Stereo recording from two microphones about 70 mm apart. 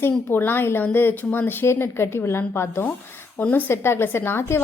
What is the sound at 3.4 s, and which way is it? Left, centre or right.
Speech, left.